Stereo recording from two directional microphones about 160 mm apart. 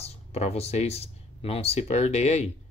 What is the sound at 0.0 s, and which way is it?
Speech, 40° left (ahead or behind).